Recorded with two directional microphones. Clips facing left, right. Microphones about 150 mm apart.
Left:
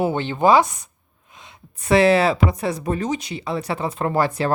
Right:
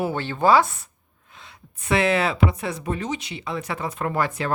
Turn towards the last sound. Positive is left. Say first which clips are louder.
# left 4 dB
turn(degrees=35)  # may be behind; listen again after turning